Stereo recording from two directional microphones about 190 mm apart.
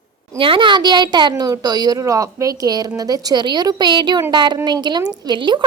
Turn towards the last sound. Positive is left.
turn(degrees=-25)  # may be behind; listen again after turning